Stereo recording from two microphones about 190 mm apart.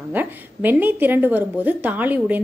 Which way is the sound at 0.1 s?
10° right (ahead or behind).